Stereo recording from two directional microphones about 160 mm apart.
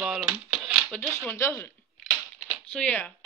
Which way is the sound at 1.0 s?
15° left (ahead or behind).